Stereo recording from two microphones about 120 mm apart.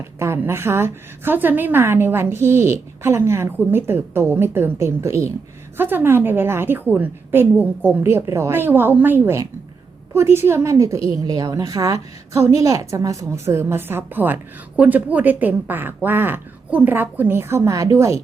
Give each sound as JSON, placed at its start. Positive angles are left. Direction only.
{"t": 0.2, "sound": "a woman's voice", "side_deg": -20}